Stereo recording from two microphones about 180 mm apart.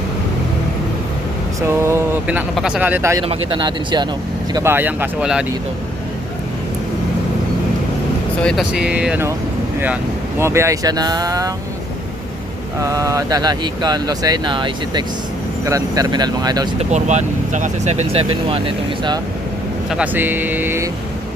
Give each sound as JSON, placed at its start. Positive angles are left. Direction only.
{"t": 1.6, "sound": "speech", "side_deg": -15}
{"t": 3.2, "sound": "speech", "side_deg": -25}
{"t": 4.5, "sound": "speech", "side_deg": -15}
{"t": 8.4, "sound": "speech", "side_deg": 0}
{"t": 12.8, "sound": "speech", "side_deg": -20}
{"t": 16.7, "sound": "speech", "side_deg": -40}
{"t": 19.9, "sound": "speech", "side_deg": -10}